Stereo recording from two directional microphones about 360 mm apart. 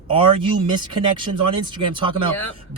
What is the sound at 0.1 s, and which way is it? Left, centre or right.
Speech, centre.